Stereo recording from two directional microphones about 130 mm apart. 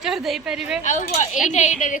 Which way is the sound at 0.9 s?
70° left (ahead or behind).